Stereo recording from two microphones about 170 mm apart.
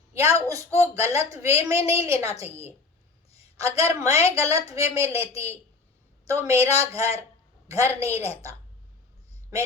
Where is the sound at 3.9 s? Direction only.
15° right (ahead or behind).